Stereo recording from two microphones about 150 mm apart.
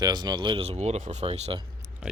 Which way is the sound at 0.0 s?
25° right (ahead or behind).